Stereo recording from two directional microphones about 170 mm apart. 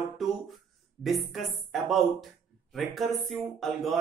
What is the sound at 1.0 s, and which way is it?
Speech, centre (ahead or behind).